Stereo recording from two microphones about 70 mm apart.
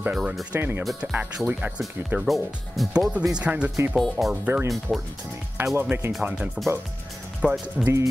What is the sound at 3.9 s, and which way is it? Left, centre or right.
Speech, centre.